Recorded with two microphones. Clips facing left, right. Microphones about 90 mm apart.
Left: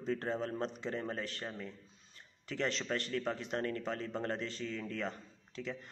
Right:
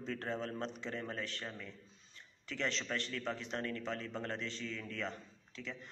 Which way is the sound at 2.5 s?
45° left (ahead or behind).